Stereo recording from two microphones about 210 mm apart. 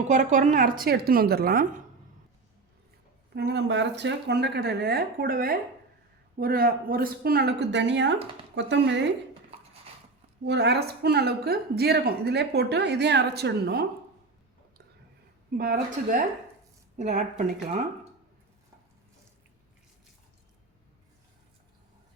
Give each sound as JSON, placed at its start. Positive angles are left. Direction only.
{"t": 0.1, "sound": "a woman's voice", "side_deg": -35}
{"t": 3.3, "sound": "a woman's voice", "side_deg": -55}
{"t": 10.4, "sound": "a woman's voice", "side_deg": -55}
{"t": 15.5, "sound": "a woman's voice", "side_deg": -45}